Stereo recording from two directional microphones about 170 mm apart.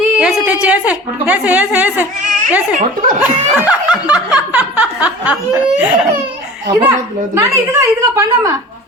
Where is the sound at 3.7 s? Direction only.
10° right (ahead or behind).